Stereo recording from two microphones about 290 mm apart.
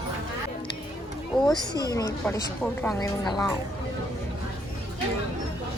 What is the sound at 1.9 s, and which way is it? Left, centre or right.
Speech, centre.